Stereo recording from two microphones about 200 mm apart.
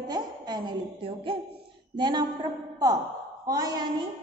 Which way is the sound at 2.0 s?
20° right (ahead or behind).